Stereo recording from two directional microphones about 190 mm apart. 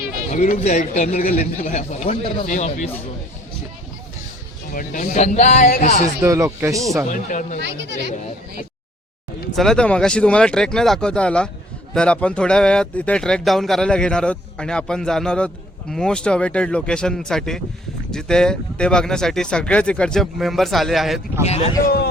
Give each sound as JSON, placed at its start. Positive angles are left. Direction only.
{"t": 0.3, "sound": "a man's voice", "side_deg": 40}
{"t": 4.7, "sound": "a man's voice", "side_deg": 45}
{"t": 6.2, "sound": "speech", "side_deg": -15}
{"t": 7.1, "sound": "a man's voice", "side_deg": 40}
{"t": 9.6, "sound": "speech", "side_deg": 5}
{"t": 21.4, "sound": "a man's voice", "side_deg": 35}